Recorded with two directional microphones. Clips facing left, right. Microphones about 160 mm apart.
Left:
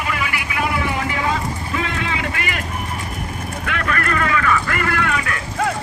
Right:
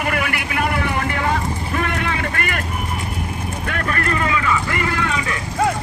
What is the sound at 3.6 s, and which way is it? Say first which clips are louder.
Vehicle: even; 35° right (ahead or behind).